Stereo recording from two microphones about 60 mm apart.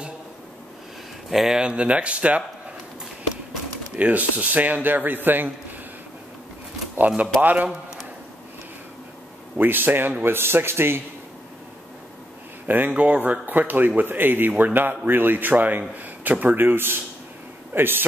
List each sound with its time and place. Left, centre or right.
1.3 s speech: centre
1.6 s speech: centre
3.9 s speech: right
7.0 s speech: right
9.6 s speech: right
12.6 s speech: right